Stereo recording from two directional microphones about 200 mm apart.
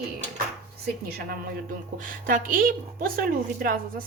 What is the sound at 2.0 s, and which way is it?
A woman's voice, 45° right (ahead or behind).